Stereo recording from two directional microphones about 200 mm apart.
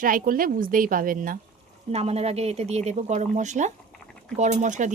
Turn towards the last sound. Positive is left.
turn(degrees=-40)  # may be behind; listen again after turning